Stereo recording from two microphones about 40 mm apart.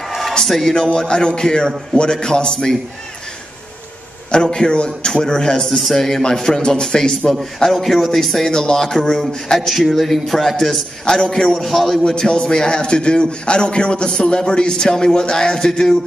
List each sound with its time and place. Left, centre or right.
0.4 s a man's voice: centre
0.9 s a man's voice: left
4.3 s a man's voice: left
5.7 s a man's voice: centre
5.9 s a man's voice: centre
7.7 s a man's voice: centre
11.1 s a man's voice: left
11.5 s a man's voice: centre
12.3 s a man's voice: left